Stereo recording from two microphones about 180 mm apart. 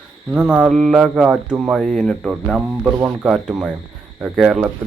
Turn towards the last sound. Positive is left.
turn(degrees=-5)  # may be behind; listen again after turning